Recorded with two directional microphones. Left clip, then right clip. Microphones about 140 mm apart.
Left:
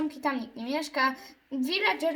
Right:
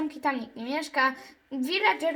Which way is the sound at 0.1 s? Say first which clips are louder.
Right 2 dB; 40° right (ahead or behind).